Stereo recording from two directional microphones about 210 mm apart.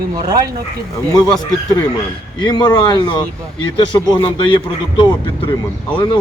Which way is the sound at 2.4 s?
20° left (ahead or behind).